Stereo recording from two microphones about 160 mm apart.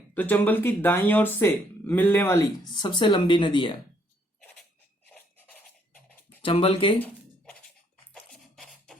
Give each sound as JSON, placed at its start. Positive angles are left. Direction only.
{"t": 0.1, "sound": "speech", "side_deg": 10}
{"t": 6.4, "sound": "speech", "side_deg": 35}
{"t": 8.1, "sound": "music", "side_deg": 5}